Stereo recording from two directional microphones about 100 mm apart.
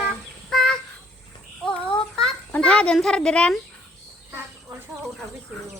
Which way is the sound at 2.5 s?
10° left (ahead or behind).